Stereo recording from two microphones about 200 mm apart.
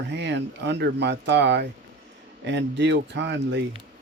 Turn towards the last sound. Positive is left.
turn(degrees=-60)  # may be behind; listen again after turning